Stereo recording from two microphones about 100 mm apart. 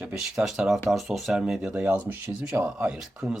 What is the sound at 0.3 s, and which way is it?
Speech, 5° right (ahead or behind).